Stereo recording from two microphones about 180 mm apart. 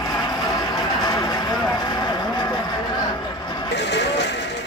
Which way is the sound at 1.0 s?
20° left (ahead or behind).